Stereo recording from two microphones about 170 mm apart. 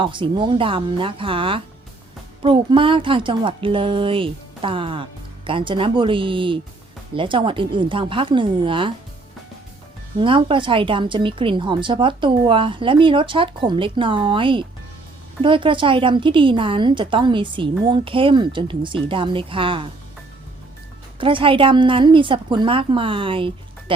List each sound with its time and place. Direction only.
0.0 s speech: 30° right (ahead or behind)
10.2 s speech: 30° right (ahead or behind)
21.2 s speech: 30° right (ahead or behind)